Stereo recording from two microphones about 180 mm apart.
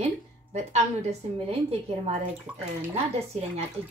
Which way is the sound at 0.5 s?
40° right (ahead or behind).